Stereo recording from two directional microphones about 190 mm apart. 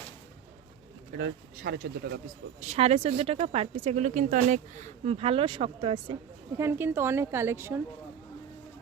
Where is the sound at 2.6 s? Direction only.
35° right (ahead or behind).